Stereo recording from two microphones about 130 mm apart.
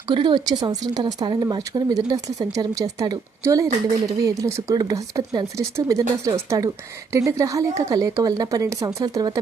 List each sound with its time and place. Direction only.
0.1 s speech: 35° right (ahead or behind)